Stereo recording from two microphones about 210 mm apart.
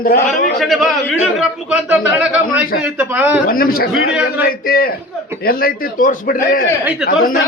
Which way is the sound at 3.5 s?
45° left (ahead or behind).